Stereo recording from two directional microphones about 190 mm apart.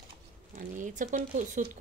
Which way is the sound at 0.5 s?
40° right (ahead or behind).